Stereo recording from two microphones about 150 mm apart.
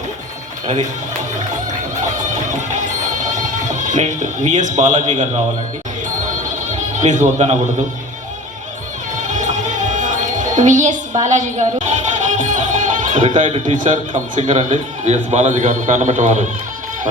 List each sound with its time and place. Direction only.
2.3 s music: 55° right (ahead or behind)
6.2 s music: 55° right (ahead or behind)
9.2 s music: 55° right (ahead or behind)
14.3 s a man's voice: 50° right (ahead or behind)